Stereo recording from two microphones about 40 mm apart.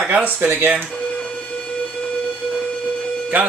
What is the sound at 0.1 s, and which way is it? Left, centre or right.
Speech, right.